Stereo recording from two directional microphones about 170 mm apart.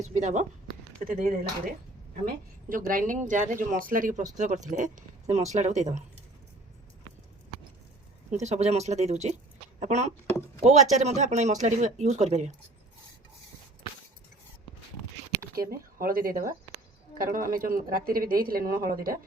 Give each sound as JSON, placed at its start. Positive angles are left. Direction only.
{"t": 0.0, "sound": "speech", "side_deg": -45}
{"t": 2.6, "sound": "speech", "side_deg": -55}
{"t": 8.3, "sound": "speech", "side_deg": -40}
{"t": 15.5, "sound": "speech", "side_deg": -60}